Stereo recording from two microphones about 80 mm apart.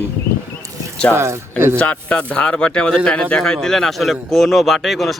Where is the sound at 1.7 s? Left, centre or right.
Centre.